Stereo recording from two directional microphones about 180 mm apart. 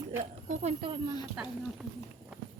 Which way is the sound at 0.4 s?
40° right (ahead or behind).